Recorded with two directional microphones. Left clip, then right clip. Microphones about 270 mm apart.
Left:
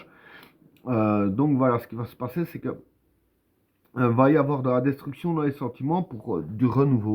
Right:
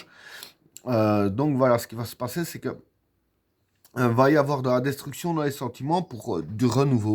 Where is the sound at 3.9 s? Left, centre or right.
Right.